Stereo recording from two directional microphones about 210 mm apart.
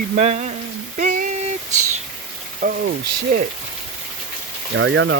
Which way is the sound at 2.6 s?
45° right (ahead or behind).